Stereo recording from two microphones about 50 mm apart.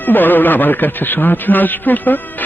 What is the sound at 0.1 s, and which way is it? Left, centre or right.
A man's voice, left.